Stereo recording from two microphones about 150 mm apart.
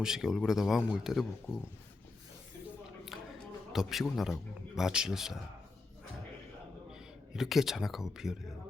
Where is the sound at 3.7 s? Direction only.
Centre (ahead or behind).